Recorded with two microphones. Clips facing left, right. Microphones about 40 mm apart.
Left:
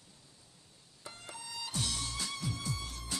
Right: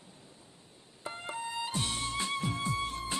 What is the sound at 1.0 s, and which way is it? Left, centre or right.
Music, right.